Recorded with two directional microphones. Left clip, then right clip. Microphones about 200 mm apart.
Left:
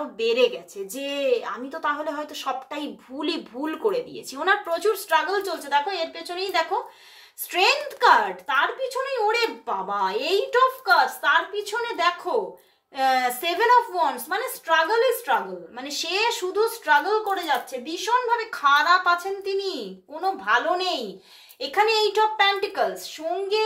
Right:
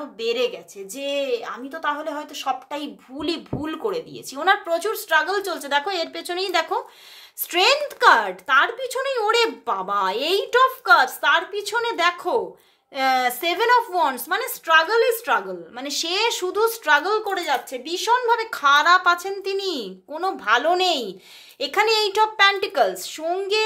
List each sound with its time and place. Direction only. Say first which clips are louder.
0.2 s a woman's voice: left 2 dB; 20° right (ahead or behind); by 15.3 s 50° right (ahead or behind)
15.8 s a woman's voice: right 2 dB; 40° right (ahead or behind)